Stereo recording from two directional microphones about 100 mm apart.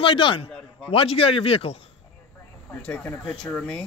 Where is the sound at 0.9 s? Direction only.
75° left (ahead or behind).